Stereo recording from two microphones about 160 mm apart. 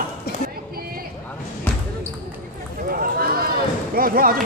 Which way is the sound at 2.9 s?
65° right (ahead or behind).